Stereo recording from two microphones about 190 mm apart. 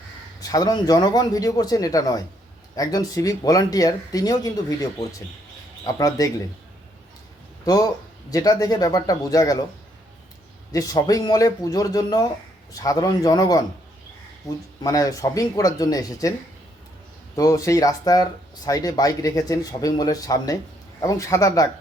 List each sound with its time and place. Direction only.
0.4 s speech: 20° left (ahead or behind)
7.6 s speech: 20° left (ahead or behind)
10.7 s speech: 20° left (ahead or behind)
14.8 s speech: 15° left (ahead or behind)
17.3 s speech: 15° left (ahead or behind)